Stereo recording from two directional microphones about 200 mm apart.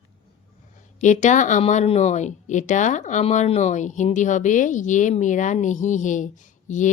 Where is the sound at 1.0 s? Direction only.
35° left (ahead or behind).